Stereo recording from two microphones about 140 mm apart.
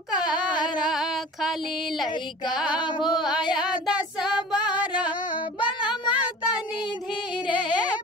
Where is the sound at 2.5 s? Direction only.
5° right (ahead or behind).